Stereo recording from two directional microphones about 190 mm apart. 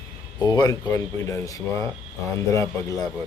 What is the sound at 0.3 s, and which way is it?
Speech, 20° left (ahead or behind).